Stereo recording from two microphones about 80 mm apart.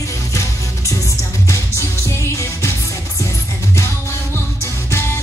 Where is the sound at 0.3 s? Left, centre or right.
Left.